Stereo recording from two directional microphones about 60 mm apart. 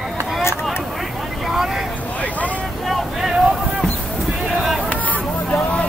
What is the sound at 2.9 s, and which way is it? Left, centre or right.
Vehicle, centre.